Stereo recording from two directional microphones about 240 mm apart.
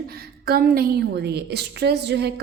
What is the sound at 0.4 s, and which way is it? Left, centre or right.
A woman's voice, right.